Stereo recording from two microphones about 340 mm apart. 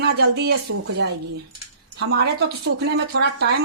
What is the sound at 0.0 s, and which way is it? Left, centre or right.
Speech, right.